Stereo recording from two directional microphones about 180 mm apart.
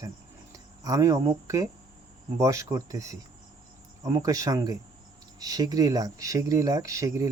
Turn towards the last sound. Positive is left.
turn(degrees=-15)  # may be behind; listen again after turning